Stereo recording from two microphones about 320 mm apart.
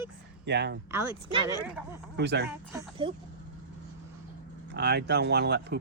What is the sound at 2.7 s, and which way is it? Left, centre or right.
Speech, centre.